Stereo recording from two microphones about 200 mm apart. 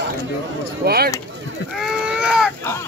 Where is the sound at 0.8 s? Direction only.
50° right (ahead or behind).